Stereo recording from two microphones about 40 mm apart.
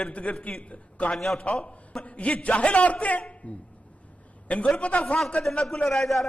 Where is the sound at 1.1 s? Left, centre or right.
Centre.